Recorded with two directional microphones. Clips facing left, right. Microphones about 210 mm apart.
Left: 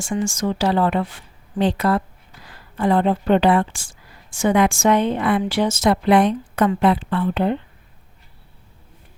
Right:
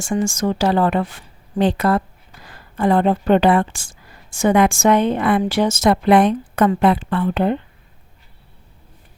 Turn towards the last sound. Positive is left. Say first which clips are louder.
# right 2 dB
turn(degrees=-50)  # may be behind; listen again after turning